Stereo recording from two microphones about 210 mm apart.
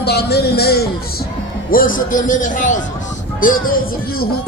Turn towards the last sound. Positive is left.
turn(degrees=40)  # may be behind; listen again after turning